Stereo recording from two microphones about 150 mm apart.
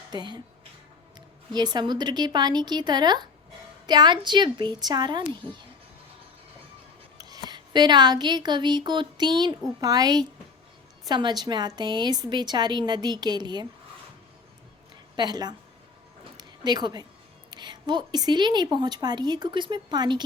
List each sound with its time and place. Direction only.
0.1 s a woman's voice: 30° right (ahead or behind)
1.5 s a woman's voice: 30° right (ahead or behind)
7.2 s a woman's voice: 25° right (ahead or behind)
15.1 s a woman's voice: 25° right (ahead or behind)